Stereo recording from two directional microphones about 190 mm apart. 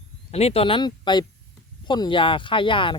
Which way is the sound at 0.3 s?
35° left (ahead or behind).